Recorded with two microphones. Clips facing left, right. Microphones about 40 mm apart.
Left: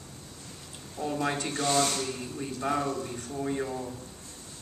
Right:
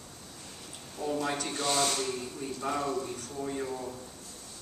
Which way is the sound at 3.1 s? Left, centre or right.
Centre.